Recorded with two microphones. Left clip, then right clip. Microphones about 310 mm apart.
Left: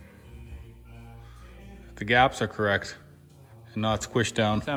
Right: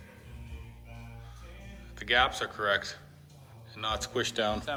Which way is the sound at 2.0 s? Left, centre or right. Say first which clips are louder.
Left 5 dB; centre.